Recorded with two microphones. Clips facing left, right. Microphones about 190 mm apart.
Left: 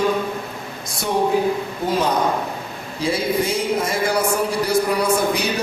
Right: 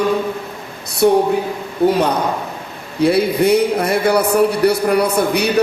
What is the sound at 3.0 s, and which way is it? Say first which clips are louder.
A man's voice: right 7 dB; 65° right (ahead or behind).